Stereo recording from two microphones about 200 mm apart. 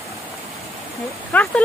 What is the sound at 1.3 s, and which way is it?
Speech, 5° left (ahead or behind).